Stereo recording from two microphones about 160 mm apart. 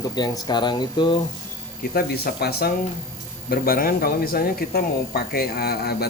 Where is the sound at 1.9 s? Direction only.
75° left (ahead or behind).